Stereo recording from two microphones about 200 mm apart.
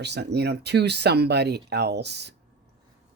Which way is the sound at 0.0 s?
55° right (ahead or behind).